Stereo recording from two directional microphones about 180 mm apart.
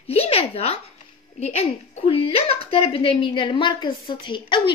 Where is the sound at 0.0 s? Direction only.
35° left (ahead or behind).